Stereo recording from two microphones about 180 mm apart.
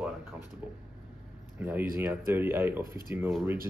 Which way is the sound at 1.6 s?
10° right (ahead or behind).